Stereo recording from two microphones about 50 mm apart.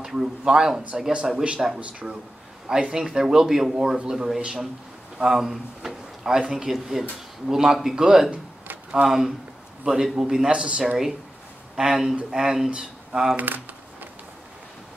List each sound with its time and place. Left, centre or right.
0.0 s a sound: centre
0.4 s speech: centre
2.7 s speech: centre
11.7 s speech: centre